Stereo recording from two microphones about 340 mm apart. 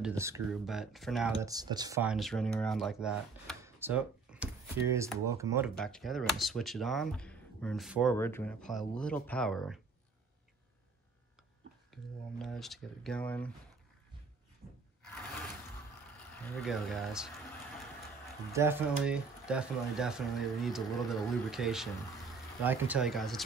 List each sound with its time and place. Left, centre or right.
0.0 s speech: centre
11.9 s speech: centre
16.4 s speech: centre
18.5 s speech: centre